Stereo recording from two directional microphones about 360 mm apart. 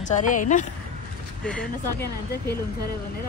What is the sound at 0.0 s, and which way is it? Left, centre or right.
Speech, left.